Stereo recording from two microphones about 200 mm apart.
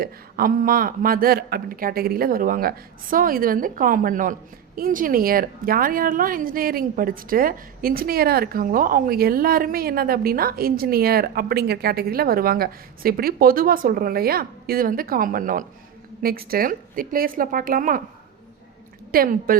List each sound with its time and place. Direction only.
0.0 s speech: 45° right (ahead or behind)
19.1 s speech: 45° right (ahead or behind)